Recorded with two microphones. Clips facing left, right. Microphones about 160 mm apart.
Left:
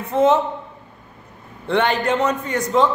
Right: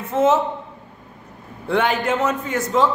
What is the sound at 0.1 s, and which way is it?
Speech, 5° right (ahead or behind).